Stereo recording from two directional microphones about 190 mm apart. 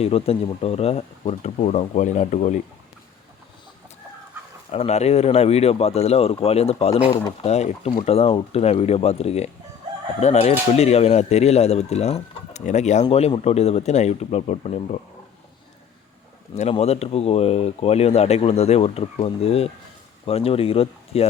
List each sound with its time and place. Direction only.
0.0 s speech: 30° left (ahead or behind)
4.7 s speech: 35° left (ahead or behind)
16.6 s speech: 35° left (ahead or behind)